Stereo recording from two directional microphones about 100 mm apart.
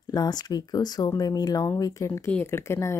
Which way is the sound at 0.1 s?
45° left (ahead or behind).